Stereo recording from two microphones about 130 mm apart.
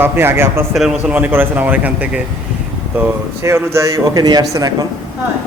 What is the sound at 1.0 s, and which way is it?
Speech, 15° right (ahead or behind).